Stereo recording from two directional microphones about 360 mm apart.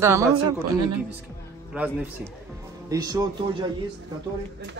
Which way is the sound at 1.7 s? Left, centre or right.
Centre.